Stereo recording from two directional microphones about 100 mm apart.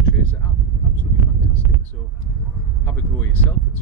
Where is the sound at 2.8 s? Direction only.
20° left (ahead or behind).